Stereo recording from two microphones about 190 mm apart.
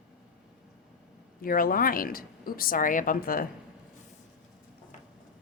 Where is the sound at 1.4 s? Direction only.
50° left (ahead or behind).